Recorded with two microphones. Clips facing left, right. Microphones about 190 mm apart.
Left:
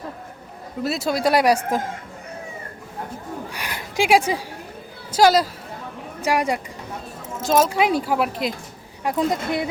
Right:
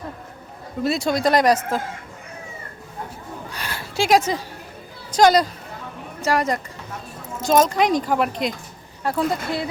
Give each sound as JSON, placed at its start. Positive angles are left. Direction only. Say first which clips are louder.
{"t": 0.8, "sound": "speech", "louder": "right 2 dB", "side_deg": 5}
{"t": 3.5, "sound": "a sound", "louder": "left 1 dB", "side_deg": 15}
{"t": 5.1, "sound": "speech", "louder": "right 1 dB", "side_deg": 5}
{"t": 9.0, "sound": "speech", "louder": "left 1 dB", "side_deg": 20}